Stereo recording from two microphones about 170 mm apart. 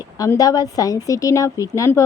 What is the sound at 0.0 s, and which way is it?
A woman's voice, 20° left (ahead or behind).